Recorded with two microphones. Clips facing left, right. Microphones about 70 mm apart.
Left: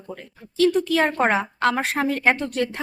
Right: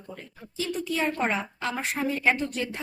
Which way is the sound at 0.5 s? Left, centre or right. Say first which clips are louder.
Left 10 dB; left.